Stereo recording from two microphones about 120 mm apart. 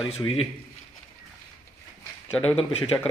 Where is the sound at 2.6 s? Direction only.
50° left (ahead or behind).